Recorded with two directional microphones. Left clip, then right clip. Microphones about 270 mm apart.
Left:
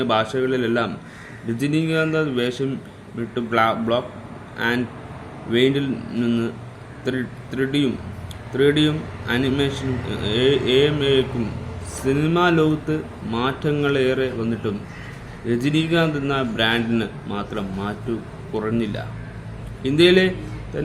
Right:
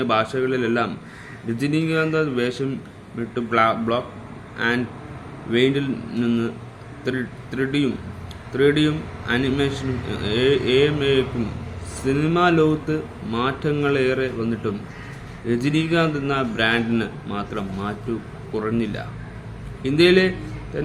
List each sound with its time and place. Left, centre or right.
0.0 s speech: centre